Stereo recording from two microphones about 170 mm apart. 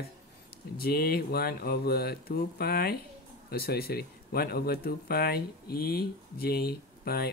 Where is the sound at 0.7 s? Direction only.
65° left (ahead or behind).